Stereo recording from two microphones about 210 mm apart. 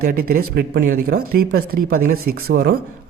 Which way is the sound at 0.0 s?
45° right (ahead or behind).